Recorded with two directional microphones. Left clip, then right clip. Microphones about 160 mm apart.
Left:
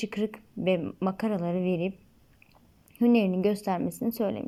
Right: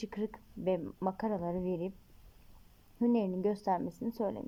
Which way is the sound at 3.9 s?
5° right (ahead or behind).